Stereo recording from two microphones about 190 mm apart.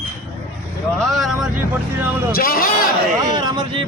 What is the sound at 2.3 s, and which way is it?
Speech, 50° left (ahead or behind).